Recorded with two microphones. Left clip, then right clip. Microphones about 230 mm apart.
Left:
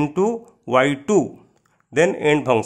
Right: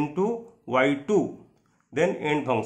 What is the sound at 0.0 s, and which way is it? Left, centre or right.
A man's voice, left.